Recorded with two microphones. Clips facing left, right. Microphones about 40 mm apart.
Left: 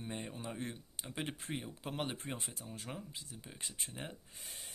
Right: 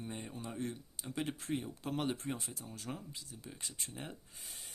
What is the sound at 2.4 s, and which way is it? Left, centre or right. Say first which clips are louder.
Speech: even; left.